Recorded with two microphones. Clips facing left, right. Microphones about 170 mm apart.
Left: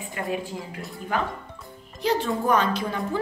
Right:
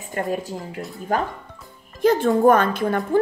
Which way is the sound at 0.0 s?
45° right (ahead or behind).